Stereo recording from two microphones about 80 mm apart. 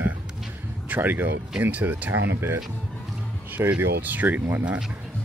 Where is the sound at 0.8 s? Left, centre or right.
Right.